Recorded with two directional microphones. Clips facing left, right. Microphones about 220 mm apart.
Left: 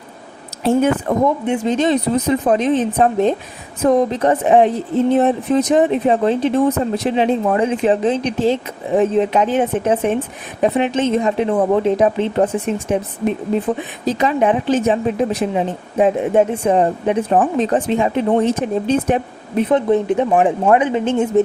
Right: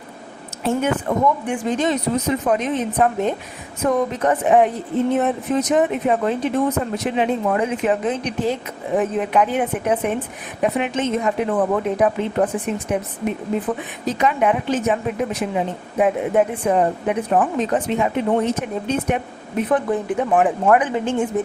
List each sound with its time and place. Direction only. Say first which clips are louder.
0.6 s a woman's voice: left 6 dB; 35° left (ahead or behind)
1.5 s speech: left 4 dB; 25° left (ahead or behind)